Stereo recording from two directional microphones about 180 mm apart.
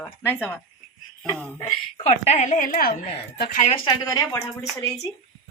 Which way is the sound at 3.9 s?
15° left (ahead or behind).